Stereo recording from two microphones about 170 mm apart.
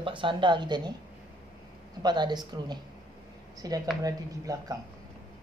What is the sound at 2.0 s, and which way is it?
Speech, 25° right (ahead or behind).